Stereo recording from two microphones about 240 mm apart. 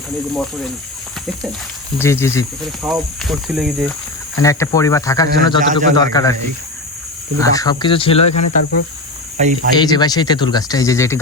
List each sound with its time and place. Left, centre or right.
0.3 s speech: centre
2.0 s speech: centre
2.8 s speech: centre
4.4 s speech: centre
7.3 s speech: centre
9.4 s speech: right
9.7 s speech: centre